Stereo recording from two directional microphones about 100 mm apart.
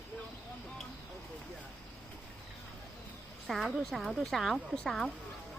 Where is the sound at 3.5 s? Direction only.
5° right (ahead or behind).